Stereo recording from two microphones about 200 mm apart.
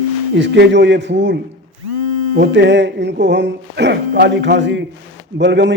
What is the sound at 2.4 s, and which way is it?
A man's voice, 60° right (ahead or behind).